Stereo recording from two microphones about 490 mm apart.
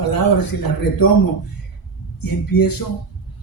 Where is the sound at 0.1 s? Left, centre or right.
Left.